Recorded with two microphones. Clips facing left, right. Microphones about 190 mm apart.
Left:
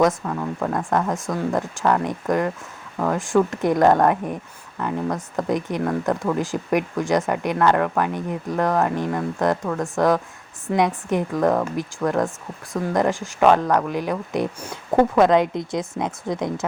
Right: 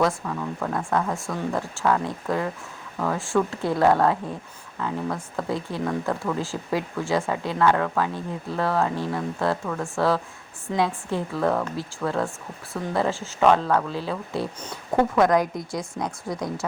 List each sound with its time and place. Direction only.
0.9 s a woman's voice: 15° left (ahead or behind)